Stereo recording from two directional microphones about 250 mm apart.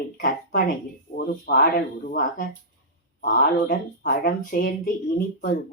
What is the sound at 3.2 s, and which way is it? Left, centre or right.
Speech, left.